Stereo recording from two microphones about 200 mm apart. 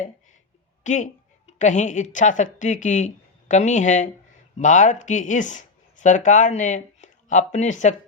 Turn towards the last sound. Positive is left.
turn(degrees=35)  # may be behind; listen again after turning